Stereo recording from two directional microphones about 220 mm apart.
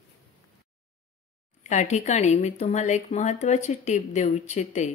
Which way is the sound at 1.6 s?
30° left (ahead or behind).